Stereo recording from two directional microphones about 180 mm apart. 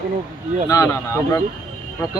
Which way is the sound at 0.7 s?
15° left (ahead or behind).